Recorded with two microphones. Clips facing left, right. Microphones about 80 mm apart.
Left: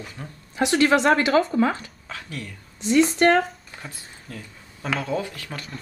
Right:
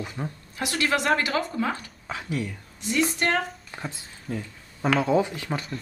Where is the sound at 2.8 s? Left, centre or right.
Left.